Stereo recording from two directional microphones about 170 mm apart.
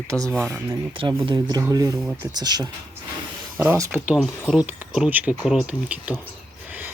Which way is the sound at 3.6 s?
10° right (ahead or behind).